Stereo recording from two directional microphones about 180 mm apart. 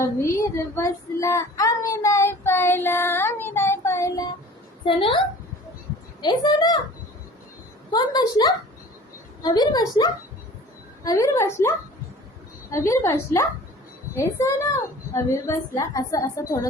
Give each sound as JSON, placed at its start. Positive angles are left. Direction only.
{"t": 0.0, "sound": "child singing", "side_deg": 15}
{"t": 4.9, "sound": "a woman's voice", "side_deg": 30}
{"t": 6.2, "sound": "a woman's voice", "side_deg": 25}
{"t": 7.9, "sound": "a woman's voice", "side_deg": 20}
{"t": 12.7, "sound": "a woman's voice", "side_deg": 15}
{"t": 14.2, "sound": "a woman's voice", "side_deg": 15}